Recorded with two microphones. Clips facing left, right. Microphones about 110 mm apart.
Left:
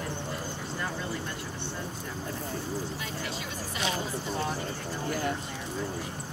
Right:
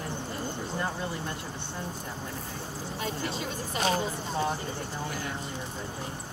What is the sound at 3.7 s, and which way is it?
Speech, 40° right (ahead or behind).